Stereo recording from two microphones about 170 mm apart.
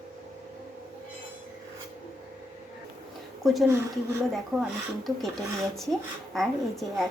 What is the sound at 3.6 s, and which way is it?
Speech, 15° right (ahead or behind).